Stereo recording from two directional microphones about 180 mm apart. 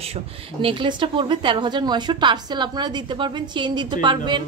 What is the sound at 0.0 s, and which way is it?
Speech, 35° right (ahead or behind).